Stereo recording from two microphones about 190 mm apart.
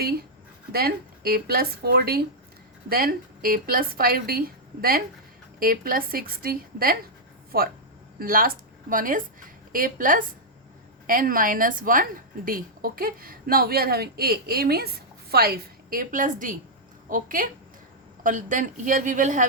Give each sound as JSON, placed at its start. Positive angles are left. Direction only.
{"t": 0.0, "sound": "a woman's voice", "side_deg": -55}